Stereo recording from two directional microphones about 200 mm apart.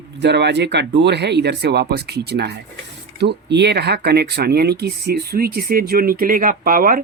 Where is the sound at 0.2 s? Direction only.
60° right (ahead or behind).